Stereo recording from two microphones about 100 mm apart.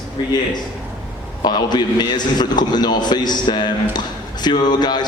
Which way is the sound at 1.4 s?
45° left (ahead or behind).